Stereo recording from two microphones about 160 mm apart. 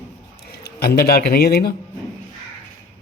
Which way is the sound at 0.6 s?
75° left (ahead or behind).